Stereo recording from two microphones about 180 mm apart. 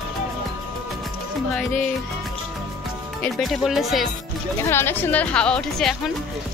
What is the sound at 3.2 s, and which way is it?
Speech, centre (ahead or behind).